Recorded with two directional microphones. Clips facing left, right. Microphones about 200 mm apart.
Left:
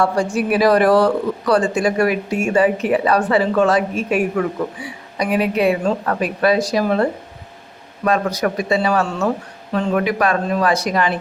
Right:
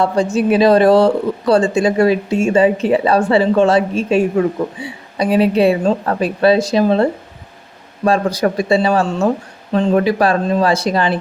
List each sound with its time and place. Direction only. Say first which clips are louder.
0.0 s speech: right 3 dB; 25° right (ahead or behind)